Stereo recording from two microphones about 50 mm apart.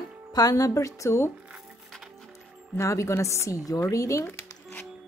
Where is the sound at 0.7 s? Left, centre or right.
Left.